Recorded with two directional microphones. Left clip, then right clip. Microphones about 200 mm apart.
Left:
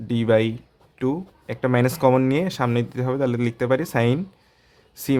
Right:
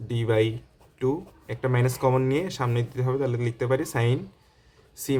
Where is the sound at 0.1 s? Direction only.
35° left (ahead or behind).